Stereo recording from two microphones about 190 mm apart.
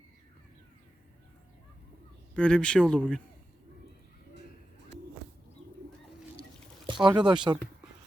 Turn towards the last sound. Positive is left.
turn(degrees=-20)  # may be behind; listen again after turning